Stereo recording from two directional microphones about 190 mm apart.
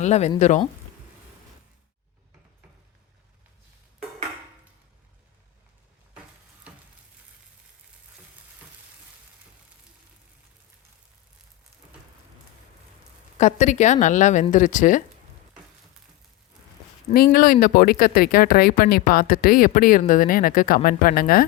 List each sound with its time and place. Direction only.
0.0 s a woman's voice: 35° left (ahead or behind)
13.4 s a woman's voice: 40° left (ahead or behind)
17.2 s speech: 50° left (ahead or behind)